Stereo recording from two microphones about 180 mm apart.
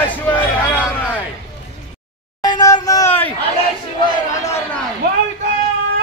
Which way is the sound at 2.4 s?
20° left (ahead or behind).